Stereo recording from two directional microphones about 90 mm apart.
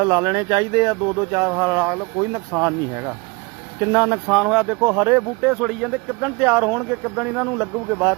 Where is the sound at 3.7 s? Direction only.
35° right (ahead or behind).